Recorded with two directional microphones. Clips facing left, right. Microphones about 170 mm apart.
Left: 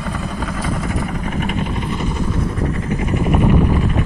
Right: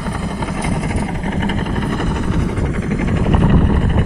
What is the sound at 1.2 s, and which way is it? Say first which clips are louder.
Vehicle: right 2 dB; 35° right (ahead or behind).